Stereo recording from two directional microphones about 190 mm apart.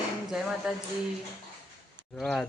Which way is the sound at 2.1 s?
Centre (ahead or behind).